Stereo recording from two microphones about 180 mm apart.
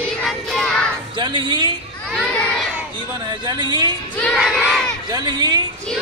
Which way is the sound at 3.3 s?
25° right (ahead or behind).